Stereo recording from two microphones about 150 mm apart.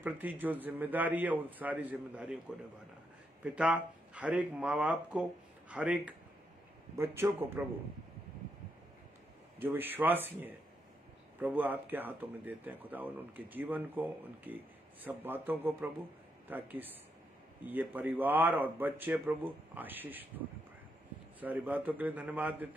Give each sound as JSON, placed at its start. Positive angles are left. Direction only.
{"t": 0.0, "sound": "speech", "side_deg": -10}
{"t": 3.4, "sound": "speech", "side_deg": -10}
{"t": 9.6, "sound": "speech", "side_deg": -15}